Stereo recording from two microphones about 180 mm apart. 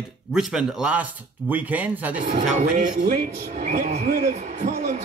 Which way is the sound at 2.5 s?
40° right (ahead or behind).